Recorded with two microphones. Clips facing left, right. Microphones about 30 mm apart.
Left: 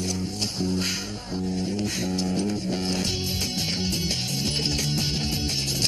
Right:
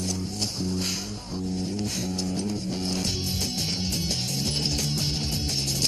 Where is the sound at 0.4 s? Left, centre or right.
Left.